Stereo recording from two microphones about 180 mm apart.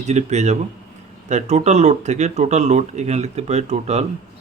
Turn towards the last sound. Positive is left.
turn(degrees=-35)  # may be behind; listen again after turning